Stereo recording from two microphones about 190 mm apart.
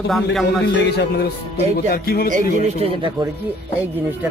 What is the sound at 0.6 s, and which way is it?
A man's voice, 60° left (ahead or behind).